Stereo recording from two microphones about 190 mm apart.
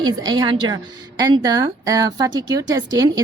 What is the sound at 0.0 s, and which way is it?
Speech, 20° right (ahead or behind).